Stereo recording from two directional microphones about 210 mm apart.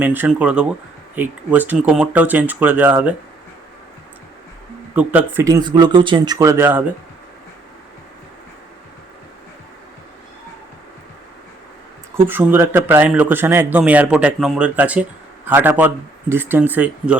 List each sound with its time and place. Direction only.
0.0 s speech: 10° right (ahead or behind)
4.9 s speech: 10° right (ahead or behind)
12.1 s speech: 10° right (ahead or behind)